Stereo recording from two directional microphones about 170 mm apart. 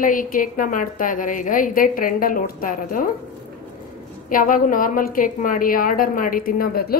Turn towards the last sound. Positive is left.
turn(degrees=60)  # may be behind; listen again after turning